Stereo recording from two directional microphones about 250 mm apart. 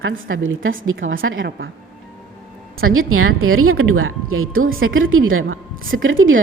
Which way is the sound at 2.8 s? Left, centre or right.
Right.